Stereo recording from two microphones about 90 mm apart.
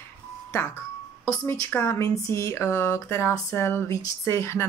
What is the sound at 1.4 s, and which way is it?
Speech, 25° left (ahead or behind).